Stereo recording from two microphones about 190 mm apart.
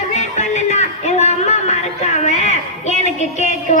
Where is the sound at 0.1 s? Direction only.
35° left (ahead or behind).